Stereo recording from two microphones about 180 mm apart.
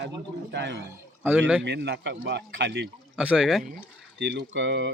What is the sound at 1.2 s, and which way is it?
Speech, 10° right (ahead or behind).